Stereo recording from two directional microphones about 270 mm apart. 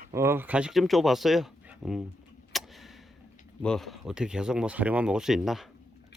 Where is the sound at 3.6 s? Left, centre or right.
Centre.